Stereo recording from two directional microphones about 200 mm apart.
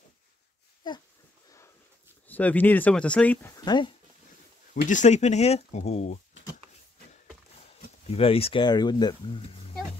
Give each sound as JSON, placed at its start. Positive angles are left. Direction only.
{"t": 0.8, "sound": "wheeze", "side_deg": 25}
{"t": 2.2, "sound": "speech", "side_deg": 10}
{"t": 4.8, "sound": "speech", "side_deg": 35}
{"t": 7.6, "sound": "speech", "side_deg": 30}